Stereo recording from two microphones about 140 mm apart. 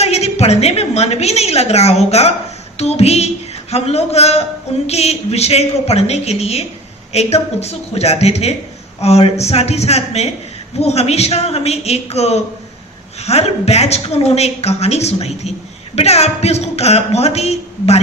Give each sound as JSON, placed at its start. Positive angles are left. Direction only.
{"t": 0.0, "sound": "a woman's voice", "side_deg": 50}